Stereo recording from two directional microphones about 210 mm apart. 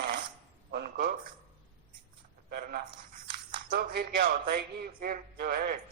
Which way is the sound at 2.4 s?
50° right (ahead or behind).